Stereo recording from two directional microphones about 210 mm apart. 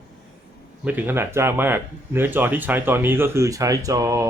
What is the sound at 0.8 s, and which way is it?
Speech, 10° right (ahead or behind).